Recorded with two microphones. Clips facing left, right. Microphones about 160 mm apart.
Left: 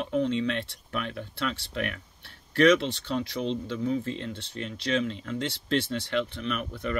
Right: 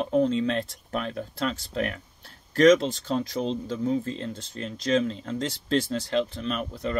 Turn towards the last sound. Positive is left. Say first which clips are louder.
# right 2 dB
turn(degrees=-35)  # may be behind; listen again after turning